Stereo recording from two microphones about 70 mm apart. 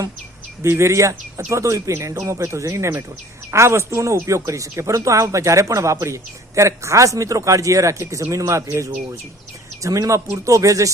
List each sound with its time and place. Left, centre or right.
0.6 s speech: right